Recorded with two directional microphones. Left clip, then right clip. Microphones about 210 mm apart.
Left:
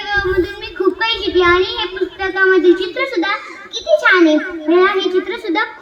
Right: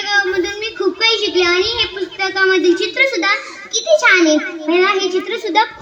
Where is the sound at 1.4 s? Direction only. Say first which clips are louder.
Left 5 dB; 45° right (ahead or behind).